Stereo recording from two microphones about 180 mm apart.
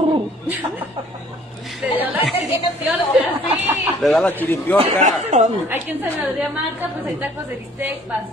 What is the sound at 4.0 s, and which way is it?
Speech, 5° left (ahead or behind).